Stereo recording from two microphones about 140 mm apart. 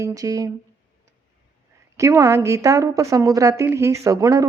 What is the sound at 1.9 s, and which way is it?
A woman's voice, 25° right (ahead or behind).